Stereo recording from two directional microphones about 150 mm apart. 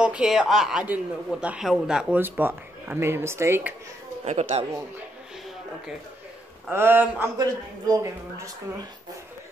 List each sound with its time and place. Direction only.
0.0 s a man's voice: 5° right (ahead or behind)
4.2 s speech: 45° right (ahead or behind)
6.7 s a man's voice: 15° right (ahead or behind)